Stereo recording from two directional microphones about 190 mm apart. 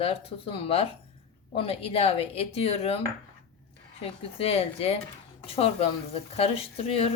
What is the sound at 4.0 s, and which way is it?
A woman's voice, 30° left (ahead or behind).